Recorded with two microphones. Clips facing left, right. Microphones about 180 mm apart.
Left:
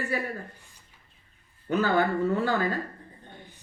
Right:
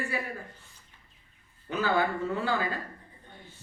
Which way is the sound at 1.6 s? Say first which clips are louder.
Left 3 dB; 45° left (ahead or behind).